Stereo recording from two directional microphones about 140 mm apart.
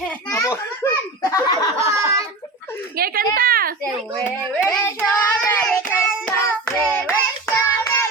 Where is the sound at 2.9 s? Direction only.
90° right.